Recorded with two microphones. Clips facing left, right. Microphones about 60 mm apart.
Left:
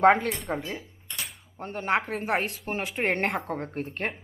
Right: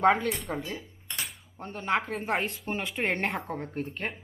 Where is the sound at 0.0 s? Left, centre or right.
Left.